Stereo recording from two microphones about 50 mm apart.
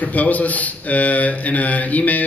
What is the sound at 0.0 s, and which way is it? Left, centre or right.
A man's voice, left.